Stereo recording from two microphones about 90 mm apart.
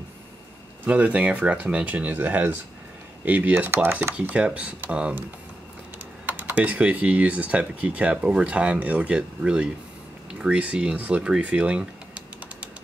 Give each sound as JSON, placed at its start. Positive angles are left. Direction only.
{"t": 0.8, "sound": "speech", "side_deg": -15}
{"t": 6.2, "sound": "speech", "side_deg": -20}